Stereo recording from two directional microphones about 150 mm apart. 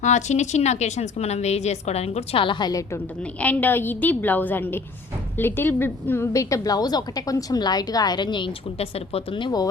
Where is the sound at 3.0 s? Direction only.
10° left (ahead or behind).